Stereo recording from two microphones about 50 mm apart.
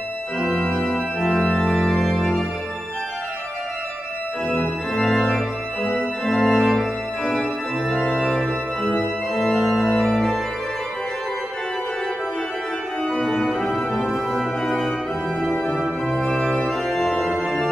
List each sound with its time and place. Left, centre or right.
0.6 s organ: centre
4.5 s organ: centre
8.8 s organ: centre
9.4 s organ: centre
13.0 s organ: centre
13.5 s music: centre
15.5 s organ: centre
17.4 s music: centre